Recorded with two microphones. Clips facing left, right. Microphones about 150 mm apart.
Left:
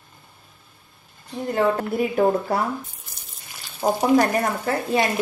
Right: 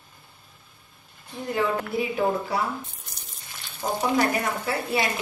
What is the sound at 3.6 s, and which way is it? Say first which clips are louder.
Frying: left 1 dB; 5° left (ahead or behind).